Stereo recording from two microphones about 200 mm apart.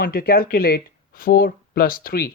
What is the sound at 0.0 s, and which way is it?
Speech, 50° left (ahead or behind).